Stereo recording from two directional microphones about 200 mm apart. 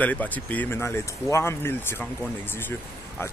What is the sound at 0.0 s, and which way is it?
Speech, 10° left (ahead or behind).